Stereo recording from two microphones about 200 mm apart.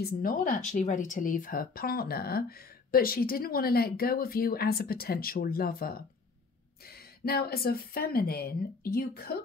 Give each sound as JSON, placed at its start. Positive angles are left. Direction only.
{"t": 0.0, "sound": "speech", "side_deg": 45}